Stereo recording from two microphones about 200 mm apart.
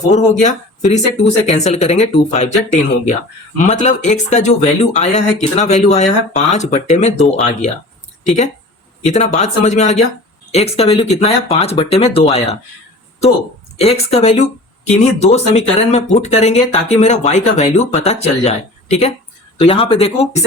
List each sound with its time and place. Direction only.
0.0 s speech: 35° left (ahead or behind)
13.7 s speech: 30° left (ahead or behind)